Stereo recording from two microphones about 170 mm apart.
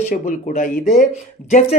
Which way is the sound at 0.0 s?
50° left (ahead or behind).